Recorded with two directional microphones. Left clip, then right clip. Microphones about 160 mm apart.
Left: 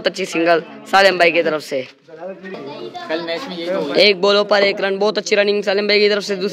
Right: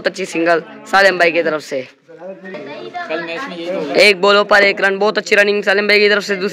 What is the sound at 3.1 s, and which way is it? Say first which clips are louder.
Speech: left 1 dB; 10° left (ahead or behind).